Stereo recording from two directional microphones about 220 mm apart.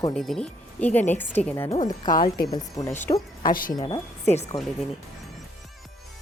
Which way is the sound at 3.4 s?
40° left (ahead or behind).